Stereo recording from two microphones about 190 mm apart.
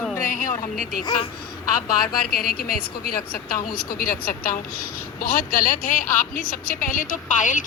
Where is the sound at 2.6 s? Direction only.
50° left (ahead or behind).